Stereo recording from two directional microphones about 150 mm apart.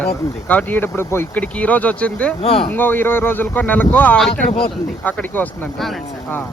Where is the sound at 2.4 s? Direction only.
40° left (ahead or behind).